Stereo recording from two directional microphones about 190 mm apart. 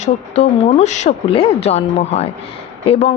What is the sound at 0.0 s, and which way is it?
A woman's voice, 40° left (ahead or behind).